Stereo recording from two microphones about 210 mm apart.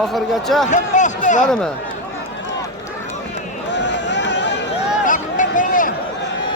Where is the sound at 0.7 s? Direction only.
35° left (ahead or behind).